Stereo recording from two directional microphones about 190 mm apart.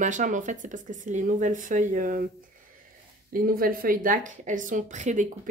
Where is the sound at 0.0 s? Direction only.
40° right (ahead or behind).